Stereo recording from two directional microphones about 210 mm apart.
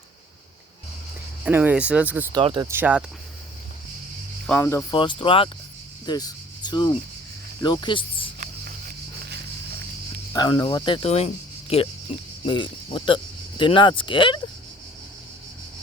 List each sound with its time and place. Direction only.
1.5 s speech: 10° right (ahead or behind)
2.3 s speech: 20° right (ahead or behind)
2.6 s speech: 10° right (ahead or behind)
4.4 s speech: 10° left (ahead or behind)
4.9 s speech: 25° left (ahead or behind)
10.3 s speech: 20° left (ahead or behind)
12.5 s speech: 25° left (ahead or behind)